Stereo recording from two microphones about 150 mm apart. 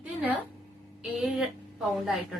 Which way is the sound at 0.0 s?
10° right (ahead or behind).